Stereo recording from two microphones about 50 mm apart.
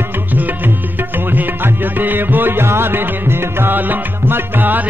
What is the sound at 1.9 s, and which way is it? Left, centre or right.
Music, right.